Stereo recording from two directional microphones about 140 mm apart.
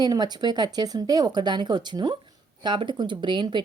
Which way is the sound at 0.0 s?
30° right (ahead or behind).